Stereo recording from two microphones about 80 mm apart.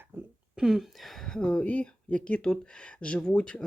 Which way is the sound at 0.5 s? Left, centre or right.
Centre.